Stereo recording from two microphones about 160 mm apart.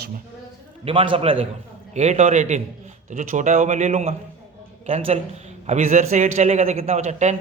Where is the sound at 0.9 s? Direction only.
35° right (ahead or behind).